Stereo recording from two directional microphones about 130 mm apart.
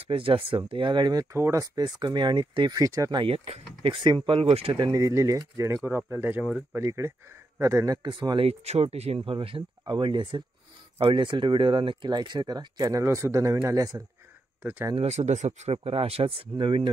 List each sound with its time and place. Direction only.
0.0 s speech: 45° right (ahead or behind)
1.3 s speech: 25° right (ahead or behind)
3.2 s speech: 45° right (ahead or behind)
4.7 s speech: 30° right (ahead or behind)
8.1 s speech: 35° right (ahead or behind)
8.5 s speech: 55° right (ahead or behind); by 14.0 s 30° right (ahead or behind)
14.6 s speech: 15° right (ahead or behind)
15.0 s speech: 55° right (ahead or behind); by 16.9 s 40° right (ahead or behind)